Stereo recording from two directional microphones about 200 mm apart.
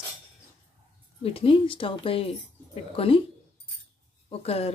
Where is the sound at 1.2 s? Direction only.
30° left (ahead or behind).